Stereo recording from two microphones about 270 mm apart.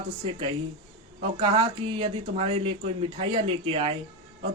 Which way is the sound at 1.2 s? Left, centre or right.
Centre.